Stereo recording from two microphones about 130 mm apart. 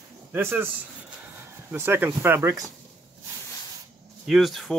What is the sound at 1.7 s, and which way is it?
Speech, 15° right (ahead or behind).